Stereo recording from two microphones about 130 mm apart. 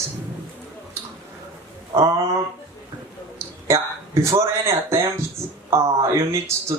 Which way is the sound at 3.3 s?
20° right (ahead or behind).